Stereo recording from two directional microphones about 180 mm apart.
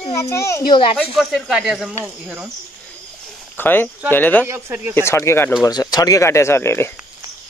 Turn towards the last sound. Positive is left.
turn(degrees=15)  # may be behind; listen again after turning